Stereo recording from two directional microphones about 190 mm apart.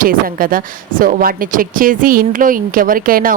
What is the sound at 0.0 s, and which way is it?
Speech, 50° right (ahead or behind).